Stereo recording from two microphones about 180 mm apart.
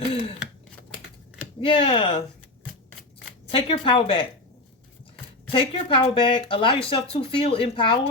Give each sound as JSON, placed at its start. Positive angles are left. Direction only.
{"t": 1.6, "sound": "speech", "side_deg": 30}
{"t": 3.5, "sound": "speech", "side_deg": 30}
{"t": 5.5, "sound": "speech", "side_deg": 30}